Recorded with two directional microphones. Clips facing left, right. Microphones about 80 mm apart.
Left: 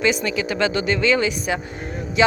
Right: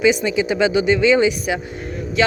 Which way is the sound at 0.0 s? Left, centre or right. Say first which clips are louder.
Right 4 dB; centre.